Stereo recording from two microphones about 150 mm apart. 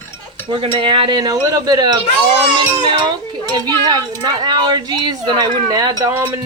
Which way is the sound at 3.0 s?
30° right (ahead or behind).